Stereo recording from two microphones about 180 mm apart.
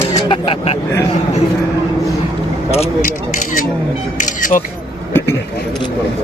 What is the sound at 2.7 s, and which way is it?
Speech, 40° left (ahead or behind).